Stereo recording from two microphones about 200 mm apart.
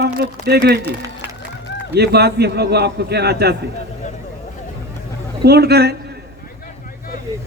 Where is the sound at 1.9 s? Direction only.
55° right (ahead or behind).